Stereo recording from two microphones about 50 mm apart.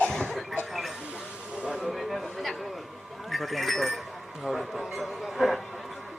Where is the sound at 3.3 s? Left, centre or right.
Centre.